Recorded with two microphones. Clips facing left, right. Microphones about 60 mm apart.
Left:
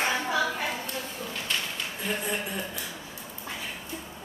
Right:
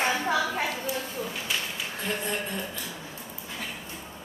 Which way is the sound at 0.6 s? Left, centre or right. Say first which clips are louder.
Right 2 dB; centre.